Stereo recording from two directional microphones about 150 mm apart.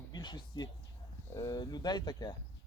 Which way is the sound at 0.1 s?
30° left (ahead or behind).